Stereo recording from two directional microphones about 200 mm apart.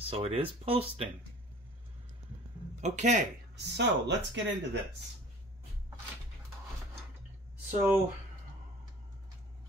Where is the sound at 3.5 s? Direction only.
60° right (ahead or behind).